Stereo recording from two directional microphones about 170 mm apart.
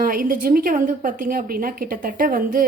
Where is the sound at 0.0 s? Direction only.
60° right (ahead or behind).